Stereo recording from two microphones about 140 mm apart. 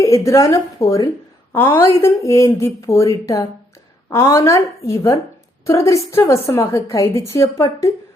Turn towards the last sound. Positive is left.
turn(degrees=20)  # may be behind; listen again after turning